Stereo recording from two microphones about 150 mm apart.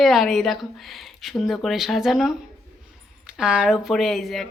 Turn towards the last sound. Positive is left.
turn(degrees=0)  # may be behind; listen again after turning